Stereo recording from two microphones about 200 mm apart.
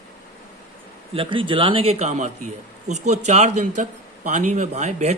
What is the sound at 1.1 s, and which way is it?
Speech, 25° right (ahead or behind).